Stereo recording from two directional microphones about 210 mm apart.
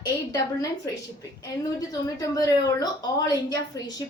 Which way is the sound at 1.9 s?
15° left (ahead or behind).